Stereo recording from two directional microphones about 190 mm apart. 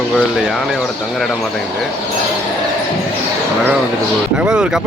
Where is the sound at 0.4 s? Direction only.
Centre (ahead or behind).